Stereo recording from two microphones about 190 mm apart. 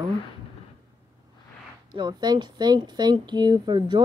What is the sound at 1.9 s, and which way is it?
Speech, 20° right (ahead or behind).